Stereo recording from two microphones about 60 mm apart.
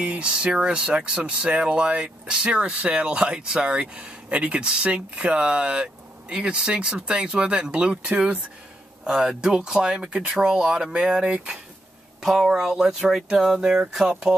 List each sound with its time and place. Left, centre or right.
0.0 s speech: centre
11.3 s speech: right
12.2 s speech: centre